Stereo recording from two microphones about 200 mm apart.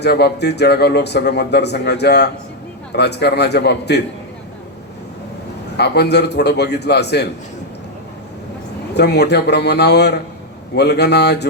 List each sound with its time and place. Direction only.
0.0 s speech: 55° left (ahead or behind)
5.7 s speech: 55° left (ahead or behind)
9.0 s speech: 55° left (ahead or behind)